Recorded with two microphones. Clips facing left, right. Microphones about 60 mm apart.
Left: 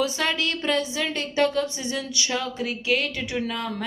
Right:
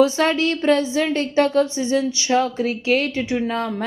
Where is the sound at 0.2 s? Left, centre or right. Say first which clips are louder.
Right 7 dB; right.